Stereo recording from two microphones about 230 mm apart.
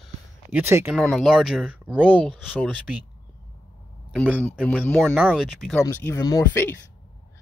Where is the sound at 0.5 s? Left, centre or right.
Centre.